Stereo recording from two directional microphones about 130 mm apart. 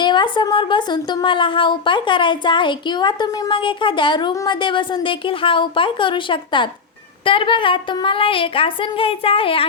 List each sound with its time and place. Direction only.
0.0 s speech: 35° left (ahead or behind)